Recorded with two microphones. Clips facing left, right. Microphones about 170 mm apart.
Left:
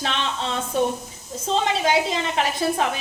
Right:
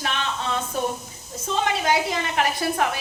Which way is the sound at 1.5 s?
25° left (ahead or behind).